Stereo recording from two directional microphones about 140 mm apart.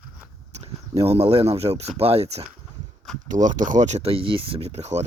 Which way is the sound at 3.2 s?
65° right (ahead or behind).